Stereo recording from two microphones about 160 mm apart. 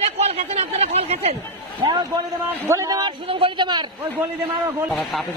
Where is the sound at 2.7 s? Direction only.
20° right (ahead or behind).